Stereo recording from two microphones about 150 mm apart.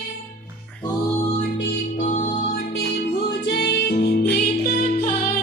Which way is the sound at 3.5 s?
90° left.